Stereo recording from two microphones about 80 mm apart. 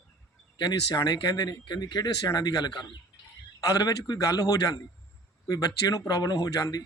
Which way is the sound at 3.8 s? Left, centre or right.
Left.